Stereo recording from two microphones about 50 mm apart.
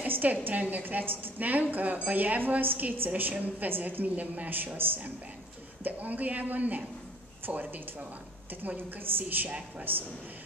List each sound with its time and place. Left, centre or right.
0.0 s a woman's voice: right
4.7 s a woman's voice: right
5.9 s a woman's voice: right
8.7 s a woman's voice: right
9.5 s speech: right